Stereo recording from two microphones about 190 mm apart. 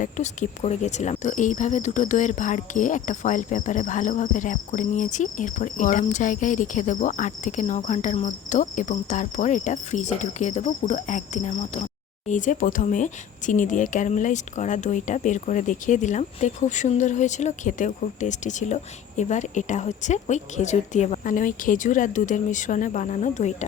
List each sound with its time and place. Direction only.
0.0 s speech: 40° left (ahead or behind)